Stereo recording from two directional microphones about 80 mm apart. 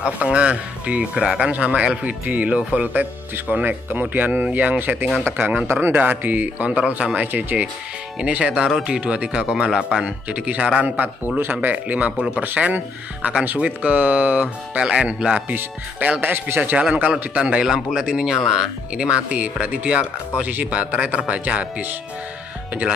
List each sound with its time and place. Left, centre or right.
0.2 s a man's voice: centre
5.7 s a man's voice: right; by 15.5 s centre
16.2 s a man's voice: right
16.9 s speech: centre